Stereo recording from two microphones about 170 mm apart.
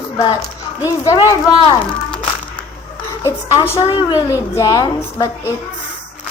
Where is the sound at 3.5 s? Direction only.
15° left (ahead or behind).